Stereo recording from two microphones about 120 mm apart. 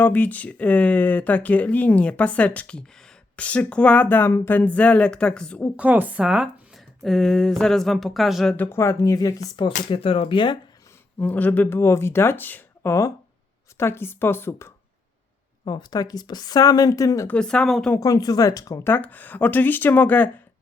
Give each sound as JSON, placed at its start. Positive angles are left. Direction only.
{"t": 0.0, "sound": "speech", "side_deg": 15}
{"t": 5.7, "sound": "speech", "side_deg": -15}
{"t": 8.5, "sound": "speech", "side_deg": 15}
{"t": 9.9, "sound": "speech", "side_deg": 50}
{"t": 11.2, "sound": "speech", "side_deg": 15}
{"t": 15.6, "sound": "speech", "side_deg": 35}
{"t": 17.2, "sound": "speech", "side_deg": 10}
{"t": 18.0, "sound": "speech", "side_deg": 30}
{"t": 18.9, "sound": "speech", "side_deg": 15}